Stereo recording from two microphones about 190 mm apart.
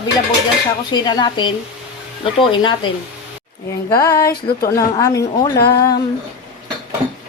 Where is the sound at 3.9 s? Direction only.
20° left (ahead or behind).